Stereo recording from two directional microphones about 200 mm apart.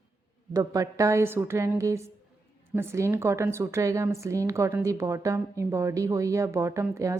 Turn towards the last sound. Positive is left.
turn(degrees=-15)  # may be behind; listen again after turning